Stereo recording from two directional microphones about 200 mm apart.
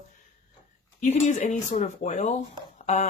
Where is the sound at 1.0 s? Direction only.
35° left (ahead or behind).